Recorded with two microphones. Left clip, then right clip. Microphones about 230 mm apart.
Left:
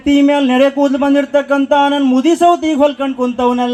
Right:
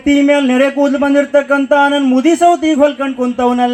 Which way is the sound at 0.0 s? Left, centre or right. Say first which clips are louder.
Right 1 dB; right.